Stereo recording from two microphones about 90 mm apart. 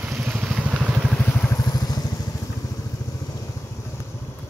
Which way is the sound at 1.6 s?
45° left (ahead or behind).